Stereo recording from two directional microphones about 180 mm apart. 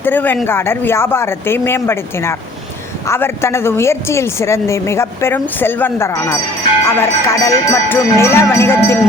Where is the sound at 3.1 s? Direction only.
15° left (ahead or behind).